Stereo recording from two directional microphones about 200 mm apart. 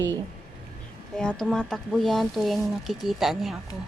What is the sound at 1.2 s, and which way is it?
Speech, 5° left (ahead or behind).